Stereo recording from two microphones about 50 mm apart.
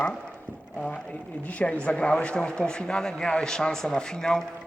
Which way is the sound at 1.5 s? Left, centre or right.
Left.